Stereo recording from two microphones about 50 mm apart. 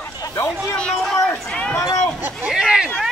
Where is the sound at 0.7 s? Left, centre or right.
Centre.